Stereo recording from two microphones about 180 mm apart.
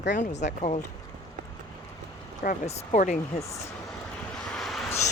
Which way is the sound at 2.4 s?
35° left (ahead or behind).